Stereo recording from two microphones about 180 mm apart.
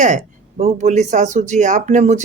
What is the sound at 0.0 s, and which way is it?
Speech, 45° right (ahead or behind).